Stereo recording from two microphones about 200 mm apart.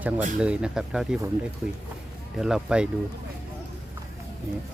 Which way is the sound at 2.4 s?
5° right (ahead or behind).